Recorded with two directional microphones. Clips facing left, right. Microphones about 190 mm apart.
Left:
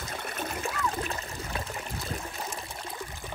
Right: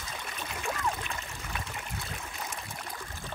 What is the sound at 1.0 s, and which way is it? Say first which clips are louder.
Water: left 5 dB; 35° left (ahead or behind).